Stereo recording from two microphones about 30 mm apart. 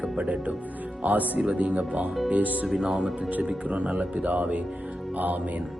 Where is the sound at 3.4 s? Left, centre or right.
Right.